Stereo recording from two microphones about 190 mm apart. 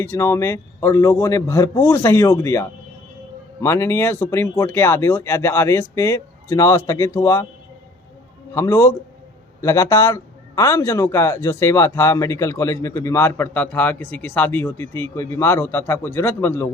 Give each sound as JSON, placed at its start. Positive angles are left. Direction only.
{"t": 0.0, "sound": "a man's voice", "side_deg": 15}
{"t": 8.5, "sound": "a man's voice", "side_deg": 15}